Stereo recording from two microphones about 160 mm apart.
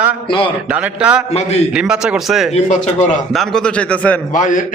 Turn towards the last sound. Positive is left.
turn(degrees=55)  # may be behind; listen again after turning